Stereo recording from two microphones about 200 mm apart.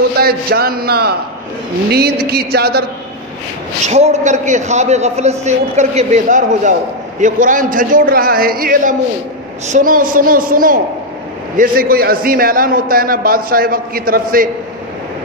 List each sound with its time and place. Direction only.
0.2 s a man's voice: 50° right (ahead or behind)
3.8 s a man's voice: 35° right (ahead or behind)